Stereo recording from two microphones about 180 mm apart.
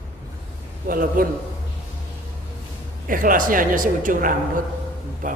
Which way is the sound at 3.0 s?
50° right (ahead or behind).